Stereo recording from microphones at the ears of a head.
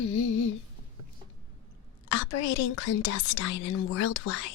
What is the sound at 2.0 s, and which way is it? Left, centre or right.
Speech, left.